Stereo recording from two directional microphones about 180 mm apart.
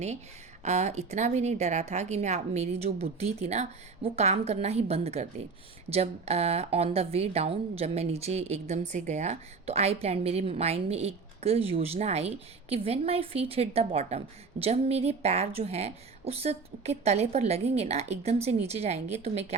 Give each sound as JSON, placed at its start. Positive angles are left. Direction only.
{"t": 0.6, "sound": "a woman's voice", "side_deg": -40}